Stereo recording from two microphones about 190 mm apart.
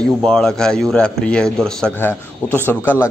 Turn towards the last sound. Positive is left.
turn(degrees=10)  # may be behind; listen again after turning